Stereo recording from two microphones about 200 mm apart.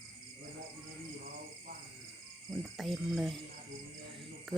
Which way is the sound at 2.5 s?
Centre (ahead or behind).